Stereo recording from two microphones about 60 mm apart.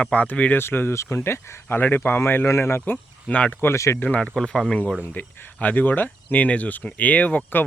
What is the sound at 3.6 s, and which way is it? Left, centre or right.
Speech, left.